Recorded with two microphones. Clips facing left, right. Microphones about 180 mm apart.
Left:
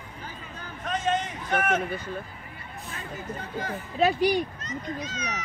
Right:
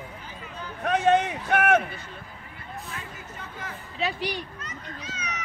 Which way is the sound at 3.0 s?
35° left (ahead or behind).